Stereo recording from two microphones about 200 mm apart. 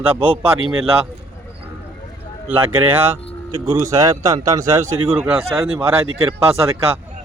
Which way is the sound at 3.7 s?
15° right (ahead or behind).